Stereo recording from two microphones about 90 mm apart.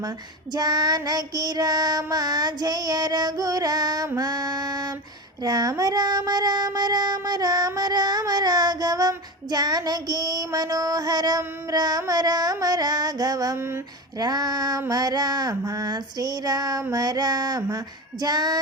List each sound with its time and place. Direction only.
0.5 s child singing: 45° right (ahead or behind)
13.6 s speech: 25° right (ahead or behind)
14.2 s child singing: 45° right (ahead or behind)